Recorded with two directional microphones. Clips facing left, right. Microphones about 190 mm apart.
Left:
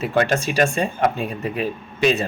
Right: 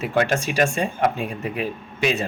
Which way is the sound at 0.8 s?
35° left (ahead or behind).